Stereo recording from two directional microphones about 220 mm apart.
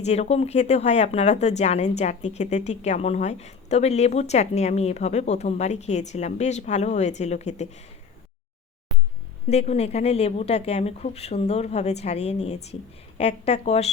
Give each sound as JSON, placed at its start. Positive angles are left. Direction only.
{"t": 0.0, "sound": "speech", "side_deg": 30}
{"t": 9.5, "sound": "speech", "side_deg": 30}